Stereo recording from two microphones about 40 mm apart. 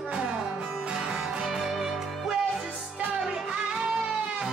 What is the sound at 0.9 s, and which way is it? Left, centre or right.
Music, centre.